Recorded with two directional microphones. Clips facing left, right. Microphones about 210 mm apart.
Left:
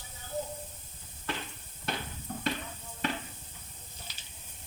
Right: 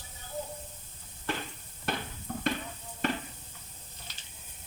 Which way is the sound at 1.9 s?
50° right (ahead or behind).